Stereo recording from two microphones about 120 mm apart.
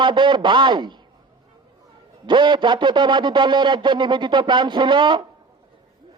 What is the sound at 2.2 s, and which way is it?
A man's voice, 40° right (ahead or behind).